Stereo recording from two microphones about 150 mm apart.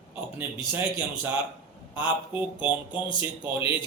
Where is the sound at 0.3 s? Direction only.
10° right (ahead or behind).